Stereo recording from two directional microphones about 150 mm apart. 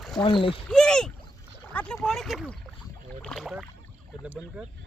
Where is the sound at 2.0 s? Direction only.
Centre (ahead or behind).